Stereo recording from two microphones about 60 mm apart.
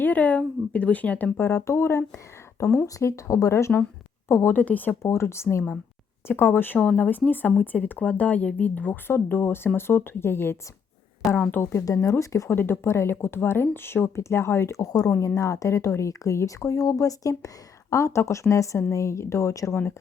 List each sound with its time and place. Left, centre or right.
0.0 s speech: left
1.4 s speech: left
4.5 s speech: left
5.0 s speech: left
6.2 s speech: left
12.0 s speech: left
12.5 s speech: left
15.4 s speech: left
17.9 s speech: left